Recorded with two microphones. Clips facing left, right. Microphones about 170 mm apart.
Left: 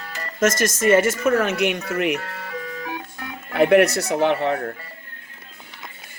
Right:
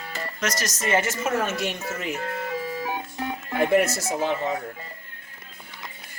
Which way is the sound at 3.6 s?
70° left (ahead or behind).